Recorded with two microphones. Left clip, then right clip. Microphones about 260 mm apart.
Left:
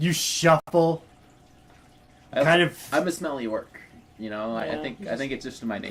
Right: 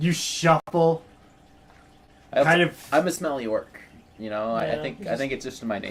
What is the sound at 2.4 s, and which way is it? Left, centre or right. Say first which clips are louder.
Speech: even; left.